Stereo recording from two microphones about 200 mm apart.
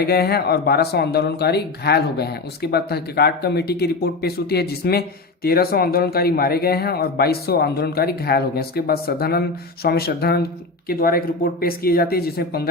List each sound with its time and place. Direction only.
0.0 s speech: 50° left (ahead or behind)